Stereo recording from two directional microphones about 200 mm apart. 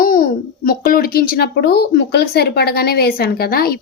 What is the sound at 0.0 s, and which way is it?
A child's voice, 45° left (ahead or behind).